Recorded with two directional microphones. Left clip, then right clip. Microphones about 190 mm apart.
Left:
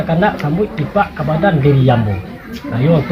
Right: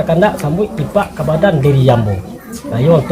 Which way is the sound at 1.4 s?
30° right (ahead or behind).